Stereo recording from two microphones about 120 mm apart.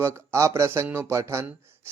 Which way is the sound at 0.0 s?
25° right (ahead or behind).